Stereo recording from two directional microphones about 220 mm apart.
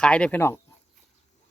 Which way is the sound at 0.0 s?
5° left (ahead or behind).